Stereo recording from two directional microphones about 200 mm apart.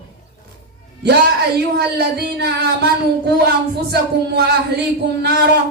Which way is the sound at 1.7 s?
55° right (ahead or behind).